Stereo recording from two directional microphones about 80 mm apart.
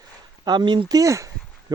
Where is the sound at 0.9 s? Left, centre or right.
Right.